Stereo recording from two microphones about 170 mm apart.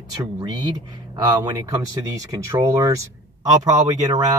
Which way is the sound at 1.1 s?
25° right (ahead or behind).